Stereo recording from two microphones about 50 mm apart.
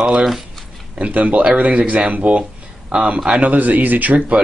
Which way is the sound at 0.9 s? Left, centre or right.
Right.